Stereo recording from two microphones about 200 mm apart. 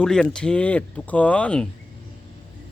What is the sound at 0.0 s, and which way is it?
Speech, 5° left (ahead or behind).